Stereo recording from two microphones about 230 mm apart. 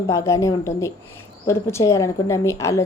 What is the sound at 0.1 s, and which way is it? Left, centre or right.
Speech, centre.